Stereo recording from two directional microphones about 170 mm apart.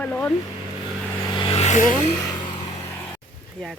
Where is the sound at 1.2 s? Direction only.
30° left (ahead or behind).